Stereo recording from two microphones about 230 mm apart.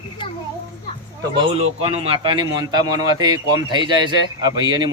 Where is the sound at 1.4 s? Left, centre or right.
Right.